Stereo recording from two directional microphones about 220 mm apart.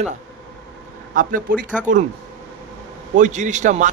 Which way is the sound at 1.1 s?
40° right (ahead or behind).